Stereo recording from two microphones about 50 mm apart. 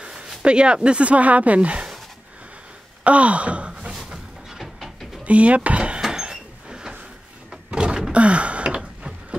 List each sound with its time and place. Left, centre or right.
0.0 s a sound: centre
0.4 s speech: right
3.0 s sigh: right
4.1 s artillery fire: centre
5.2 s speech: right
5.9 s a sound: centre
7.7 s door: centre
8.1 s gasp: right